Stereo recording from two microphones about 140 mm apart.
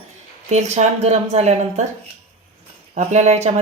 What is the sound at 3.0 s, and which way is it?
Speech, 50° right (ahead or behind).